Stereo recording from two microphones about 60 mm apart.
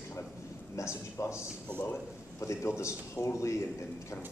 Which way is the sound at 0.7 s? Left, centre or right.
Left.